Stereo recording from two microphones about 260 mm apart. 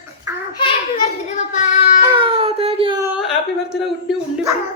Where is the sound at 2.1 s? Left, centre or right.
Centre.